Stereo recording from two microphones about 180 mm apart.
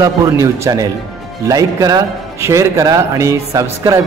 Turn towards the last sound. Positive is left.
turn(degrees=-15)  # may be behind; listen again after turning